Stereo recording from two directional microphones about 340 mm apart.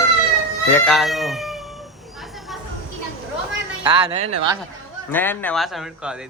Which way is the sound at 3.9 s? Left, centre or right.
Centre.